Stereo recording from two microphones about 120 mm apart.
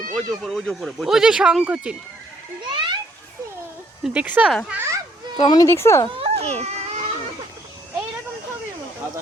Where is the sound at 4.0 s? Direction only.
10° right (ahead or behind).